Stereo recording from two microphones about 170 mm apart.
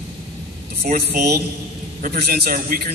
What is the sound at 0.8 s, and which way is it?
A man's voice, 65° right (ahead or behind).